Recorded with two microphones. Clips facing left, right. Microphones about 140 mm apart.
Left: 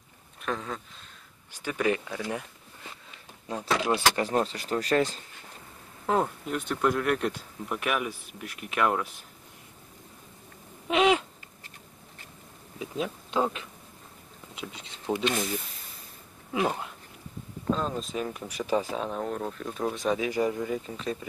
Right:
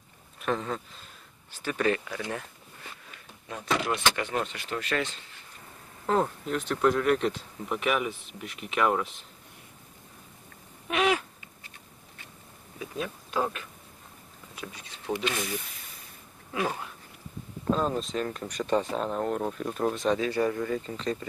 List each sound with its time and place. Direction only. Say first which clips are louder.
0.4 s speech: right 3 dB; centre (ahead or behind)
1.5 s speech: even; 15° left (ahead or behind)
3.5 s speech: left 2 dB; 35° left (ahead or behind)
6.0 s speech: even; 5° left (ahead or behind)
10.9 s a sound: left 3 dB; 20° left (ahead or behind)
12.7 s speech: left 2 dB; 20° left (ahead or behind)
17.7 s speech: right 2 dB; centre (ahead or behind)
20.2 s speech: even; 15° left (ahead or behind)